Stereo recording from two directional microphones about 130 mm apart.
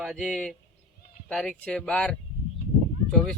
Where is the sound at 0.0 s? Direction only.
5° left (ahead or behind).